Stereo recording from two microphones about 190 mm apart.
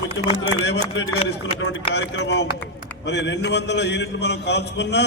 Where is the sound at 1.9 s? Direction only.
65° left (ahead or behind).